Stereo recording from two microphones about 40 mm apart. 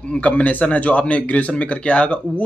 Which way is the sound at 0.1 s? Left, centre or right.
Left.